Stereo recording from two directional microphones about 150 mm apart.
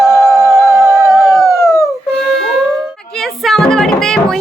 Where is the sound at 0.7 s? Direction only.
Centre (ahead or behind).